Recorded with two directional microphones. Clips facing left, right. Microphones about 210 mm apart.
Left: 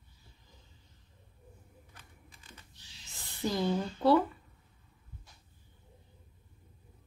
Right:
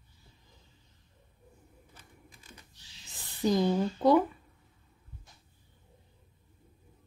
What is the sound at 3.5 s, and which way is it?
Speech, 15° right (ahead or behind).